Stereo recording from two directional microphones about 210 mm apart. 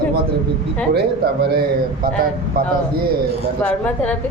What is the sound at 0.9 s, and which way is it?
Speech, 50° right (ahead or behind).